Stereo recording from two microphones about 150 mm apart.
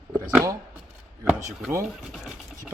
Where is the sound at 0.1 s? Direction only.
10° right (ahead or behind).